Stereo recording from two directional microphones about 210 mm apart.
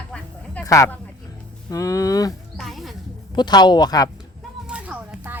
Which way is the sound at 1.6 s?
15° left (ahead or behind).